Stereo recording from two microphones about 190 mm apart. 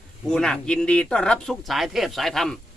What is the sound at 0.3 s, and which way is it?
Speech, 5° left (ahead or behind).